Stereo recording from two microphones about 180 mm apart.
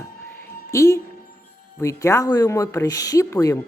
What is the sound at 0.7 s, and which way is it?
Speech, 15° left (ahead or behind).